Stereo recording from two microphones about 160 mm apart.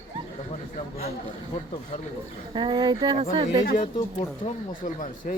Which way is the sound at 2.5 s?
30° right (ahead or behind).